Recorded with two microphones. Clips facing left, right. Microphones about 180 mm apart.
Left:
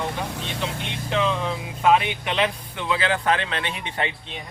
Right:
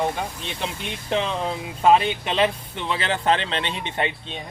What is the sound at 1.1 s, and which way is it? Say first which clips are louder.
Speech: left 1 dB; 35° right (ahead or behind).